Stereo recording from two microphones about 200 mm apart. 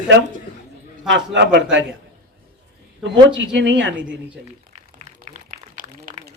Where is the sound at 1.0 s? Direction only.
60° right (ahead or behind).